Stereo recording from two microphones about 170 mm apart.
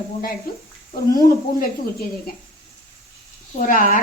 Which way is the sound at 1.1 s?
55° left (ahead or behind).